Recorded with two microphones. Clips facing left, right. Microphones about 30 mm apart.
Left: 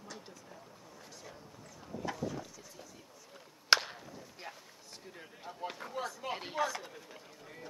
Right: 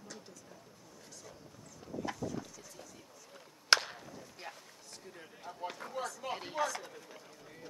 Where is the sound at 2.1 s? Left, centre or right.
Centre.